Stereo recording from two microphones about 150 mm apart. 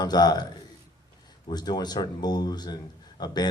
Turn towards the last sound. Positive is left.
turn(degrees=25)  # may be behind; listen again after turning